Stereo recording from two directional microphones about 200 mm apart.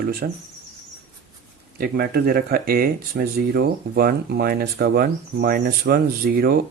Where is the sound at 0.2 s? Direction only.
50° right (ahead or behind).